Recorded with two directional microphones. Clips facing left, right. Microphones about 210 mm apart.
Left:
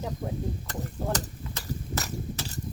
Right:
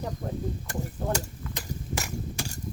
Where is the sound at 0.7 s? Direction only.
15° right (ahead or behind).